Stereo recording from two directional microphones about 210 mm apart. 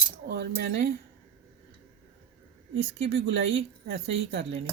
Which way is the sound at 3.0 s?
60° right (ahead or behind).